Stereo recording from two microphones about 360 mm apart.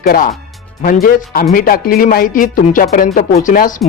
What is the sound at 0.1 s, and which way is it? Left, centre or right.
Speech, left.